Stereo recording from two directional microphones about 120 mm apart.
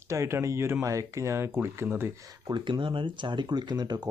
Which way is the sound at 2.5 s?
40° right (ahead or behind).